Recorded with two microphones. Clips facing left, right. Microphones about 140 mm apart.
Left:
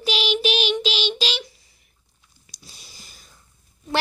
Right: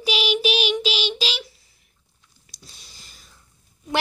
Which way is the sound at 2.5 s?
5° left (ahead or behind).